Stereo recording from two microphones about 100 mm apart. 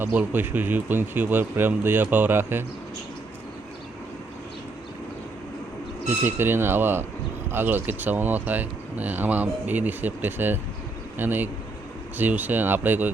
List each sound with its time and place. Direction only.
0.0 s speech: 20° right (ahead or behind)
6.2 s speech: 20° right (ahead or behind)